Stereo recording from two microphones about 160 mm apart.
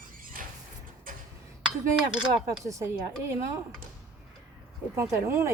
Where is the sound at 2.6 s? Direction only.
20° right (ahead or behind).